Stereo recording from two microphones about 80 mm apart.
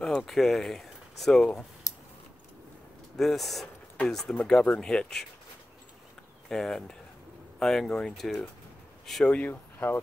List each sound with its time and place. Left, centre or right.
0.0 s speech: centre
1.9 s keys jangling: left
3.2 s speech: centre
6.5 s speech: centre
9.3 s speech: left